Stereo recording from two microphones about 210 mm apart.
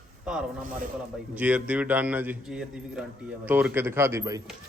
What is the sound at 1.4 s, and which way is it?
A man's voice, 5° right (ahead or behind).